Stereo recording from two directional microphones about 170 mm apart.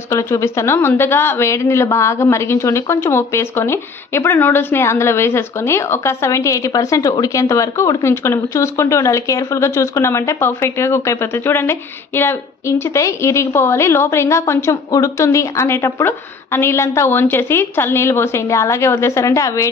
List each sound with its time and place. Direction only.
0.1 s speech: 15° left (ahead or behind)